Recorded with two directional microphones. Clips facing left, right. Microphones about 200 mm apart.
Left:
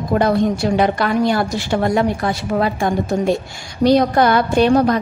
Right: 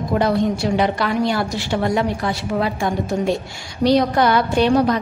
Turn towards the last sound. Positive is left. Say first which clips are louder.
# left 2 dB
turn(degrees=50)  # may be behind; listen again after turning